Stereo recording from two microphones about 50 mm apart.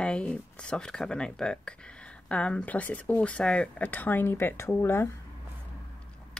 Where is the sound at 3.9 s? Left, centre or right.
Left.